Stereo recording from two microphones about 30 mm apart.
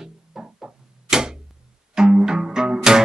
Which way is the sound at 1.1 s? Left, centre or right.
Centre.